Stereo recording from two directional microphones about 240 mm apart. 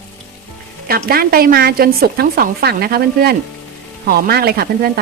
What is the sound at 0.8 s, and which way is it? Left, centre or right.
A woman's voice, right.